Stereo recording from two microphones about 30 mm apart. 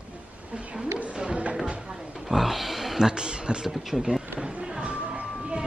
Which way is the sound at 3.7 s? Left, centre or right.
Centre.